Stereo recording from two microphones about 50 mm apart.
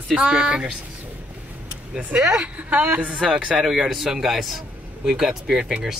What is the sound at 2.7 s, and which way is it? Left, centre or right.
Speech, right.